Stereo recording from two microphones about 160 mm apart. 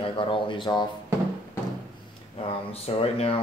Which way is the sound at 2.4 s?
40° left (ahead or behind).